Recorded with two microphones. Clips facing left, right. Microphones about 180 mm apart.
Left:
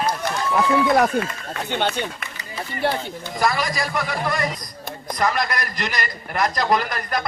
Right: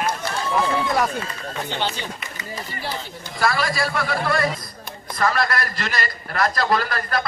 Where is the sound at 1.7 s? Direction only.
55° left (ahead or behind).